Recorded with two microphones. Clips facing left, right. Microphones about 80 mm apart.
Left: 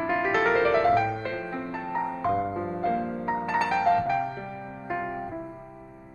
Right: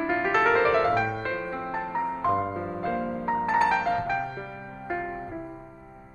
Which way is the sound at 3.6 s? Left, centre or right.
Right.